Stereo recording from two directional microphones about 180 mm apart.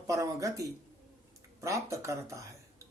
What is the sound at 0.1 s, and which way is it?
Music, 20° right (ahead or behind).